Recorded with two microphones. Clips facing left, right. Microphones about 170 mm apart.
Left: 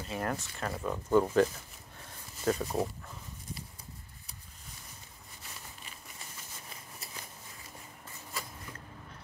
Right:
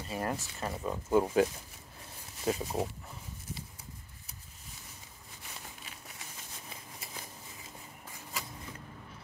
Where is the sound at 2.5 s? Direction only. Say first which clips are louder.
Left 2 dB; 15° right (ahead or behind).